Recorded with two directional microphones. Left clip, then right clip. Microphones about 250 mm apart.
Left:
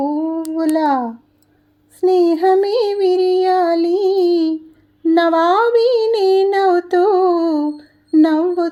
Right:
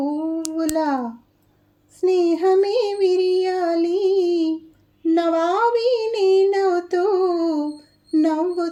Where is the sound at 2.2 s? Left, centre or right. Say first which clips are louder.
Left 4 dB; centre.